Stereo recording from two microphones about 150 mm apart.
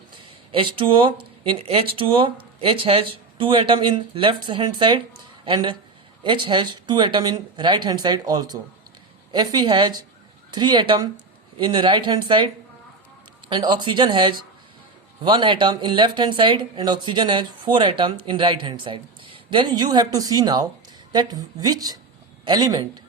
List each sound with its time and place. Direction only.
0.1 s speech: 35° right (ahead or behind)
6.2 s speech: 30° right (ahead or behind)
13.5 s speech: 30° right (ahead or behind)